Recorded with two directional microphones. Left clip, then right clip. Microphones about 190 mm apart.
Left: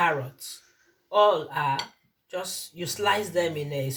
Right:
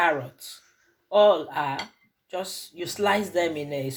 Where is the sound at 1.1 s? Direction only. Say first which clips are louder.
Right 2 dB; 30° right (ahead or behind).